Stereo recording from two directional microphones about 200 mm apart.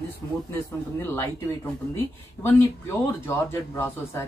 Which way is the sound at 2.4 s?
10° left (ahead or behind).